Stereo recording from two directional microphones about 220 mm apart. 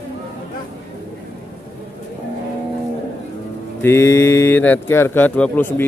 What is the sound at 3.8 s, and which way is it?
Speech, 15° left (ahead or behind).